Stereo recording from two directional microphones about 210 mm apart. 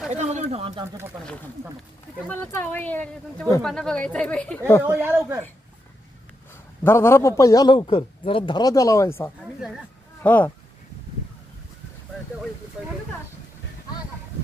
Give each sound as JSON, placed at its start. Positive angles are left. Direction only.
{"t": 0.1, "sound": "speech", "side_deg": -30}
{"t": 2.2, "sound": "a man's voice", "side_deg": 5}
{"t": 4.8, "sound": "speech", "side_deg": -10}
{"t": 6.8, "sound": "a man's voice", "side_deg": 10}